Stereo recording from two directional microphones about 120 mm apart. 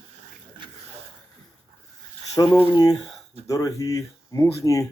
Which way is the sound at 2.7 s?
35° left (ahead or behind).